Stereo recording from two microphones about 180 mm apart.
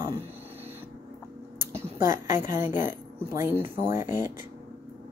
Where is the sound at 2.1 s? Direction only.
45° left (ahead or behind).